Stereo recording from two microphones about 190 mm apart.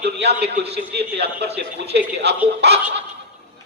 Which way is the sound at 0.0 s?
60° right (ahead or behind).